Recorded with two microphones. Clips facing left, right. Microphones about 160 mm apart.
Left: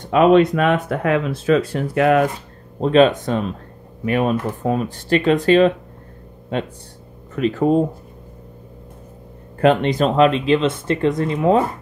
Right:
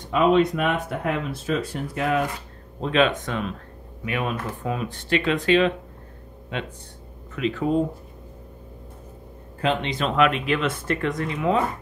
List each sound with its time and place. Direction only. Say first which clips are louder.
0.1 s speech: left 6 dB; 70° left (ahead or behind)
2.8 s speech: left 7 dB; 35° left (ahead or behind)
9.6 s speech: left 9 dB; 50° left (ahead or behind)